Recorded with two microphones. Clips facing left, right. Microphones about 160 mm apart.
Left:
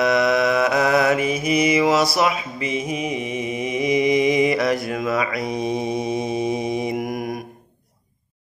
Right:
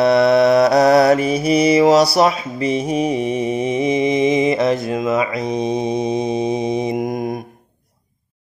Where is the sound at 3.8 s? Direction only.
25° right (ahead or behind).